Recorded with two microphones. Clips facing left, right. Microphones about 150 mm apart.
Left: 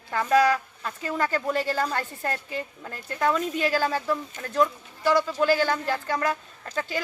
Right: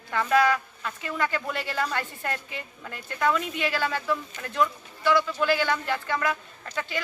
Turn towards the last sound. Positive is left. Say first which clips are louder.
# left 2 dB
turn(degrees=40)  # may be behind; listen again after turning